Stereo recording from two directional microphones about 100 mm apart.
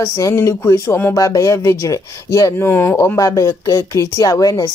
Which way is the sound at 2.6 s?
20° left (ahead or behind).